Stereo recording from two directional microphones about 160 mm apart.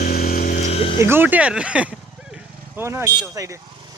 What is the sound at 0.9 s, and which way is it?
Speech, 15° right (ahead or behind).